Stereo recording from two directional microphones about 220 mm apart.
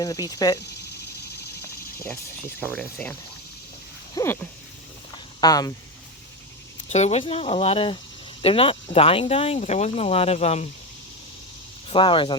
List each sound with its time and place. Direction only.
0.0 s speech: 15° left (ahead or behind)
2.6 s speech: 10° left (ahead or behind)
4.1 s a sound: 15° left (ahead or behind)
5.4 s speech: 15° left (ahead or behind)
6.8 s speech: 30° left (ahead or behind)
11.9 s speech: 25° left (ahead or behind)